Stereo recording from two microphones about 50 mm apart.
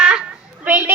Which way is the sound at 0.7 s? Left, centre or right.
Right.